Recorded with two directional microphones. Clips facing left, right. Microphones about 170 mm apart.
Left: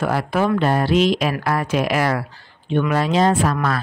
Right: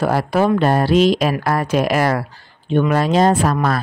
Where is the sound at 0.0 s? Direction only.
35° right (ahead or behind).